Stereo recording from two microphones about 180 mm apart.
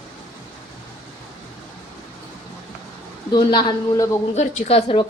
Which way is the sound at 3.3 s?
20° left (ahead or behind).